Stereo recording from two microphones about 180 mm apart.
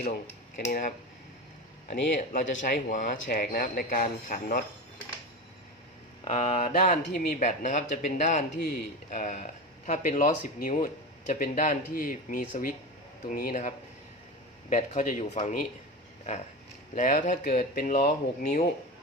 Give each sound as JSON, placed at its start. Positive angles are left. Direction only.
{"t": 0.7, "sound": "speech", "side_deg": 50}
{"t": 2.0, "sound": "speech", "side_deg": 45}
{"t": 6.2, "sound": "speech", "side_deg": 35}
{"t": 16.9, "sound": "speech", "side_deg": 50}